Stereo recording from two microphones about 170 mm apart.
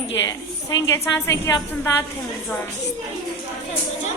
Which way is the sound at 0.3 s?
20° left (ahead or behind).